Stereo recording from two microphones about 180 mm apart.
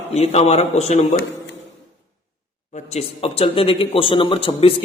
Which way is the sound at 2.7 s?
40° left (ahead or behind).